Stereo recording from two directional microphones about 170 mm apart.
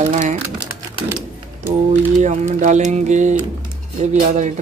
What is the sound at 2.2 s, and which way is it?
Speech, 45° right (ahead or behind).